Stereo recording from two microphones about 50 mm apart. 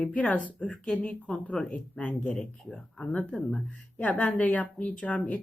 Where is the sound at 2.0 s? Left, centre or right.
Left.